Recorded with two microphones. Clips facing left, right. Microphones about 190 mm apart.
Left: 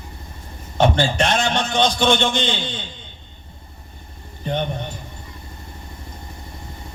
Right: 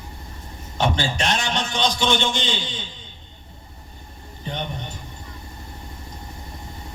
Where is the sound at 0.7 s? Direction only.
55° left (ahead or behind).